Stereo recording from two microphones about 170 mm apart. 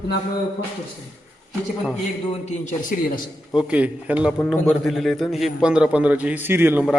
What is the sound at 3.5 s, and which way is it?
A man's voice, 10° right (ahead or behind).